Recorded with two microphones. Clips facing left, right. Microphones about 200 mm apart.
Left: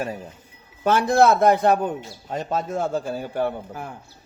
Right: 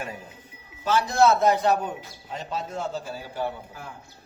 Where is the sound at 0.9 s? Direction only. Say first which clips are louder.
Left 3 dB; 55° left (ahead or behind).